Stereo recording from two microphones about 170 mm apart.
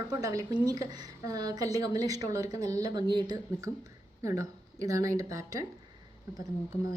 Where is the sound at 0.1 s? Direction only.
20° right (ahead or behind).